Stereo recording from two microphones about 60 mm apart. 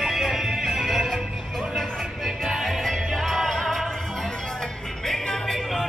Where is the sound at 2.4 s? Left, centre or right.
Centre.